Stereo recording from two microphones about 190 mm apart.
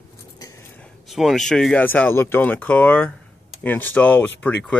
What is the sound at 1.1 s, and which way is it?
Speech, centre (ahead or behind).